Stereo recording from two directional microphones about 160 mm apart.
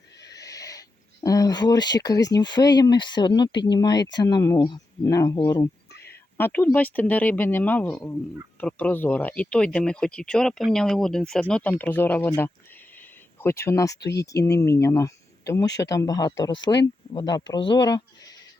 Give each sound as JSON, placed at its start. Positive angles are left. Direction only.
{"t": 0.3, "sound": "speech", "side_deg": 20}
{"t": 13.0, "sound": "a sound", "side_deg": 15}
{"t": 14.3, "sound": "speech", "side_deg": 20}